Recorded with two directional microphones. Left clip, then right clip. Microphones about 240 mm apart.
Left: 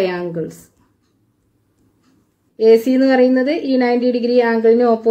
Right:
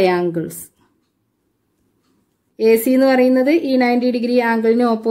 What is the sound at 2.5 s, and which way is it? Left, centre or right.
A woman's voice, right.